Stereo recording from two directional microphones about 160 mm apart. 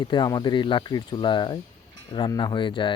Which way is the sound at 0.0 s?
30° left (ahead or behind).